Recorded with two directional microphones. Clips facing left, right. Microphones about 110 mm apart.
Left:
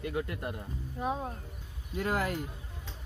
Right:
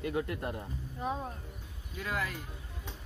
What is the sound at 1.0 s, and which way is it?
Speech, 15° left (ahead or behind).